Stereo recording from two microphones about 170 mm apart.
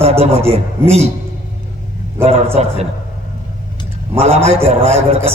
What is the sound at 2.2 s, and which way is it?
Speech, 40° right (ahead or behind).